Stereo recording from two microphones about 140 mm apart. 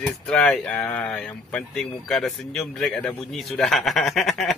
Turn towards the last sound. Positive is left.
turn(degrees=0)  # may be behind; listen again after turning